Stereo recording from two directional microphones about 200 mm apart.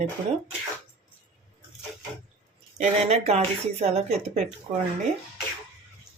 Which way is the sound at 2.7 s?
30° right (ahead or behind).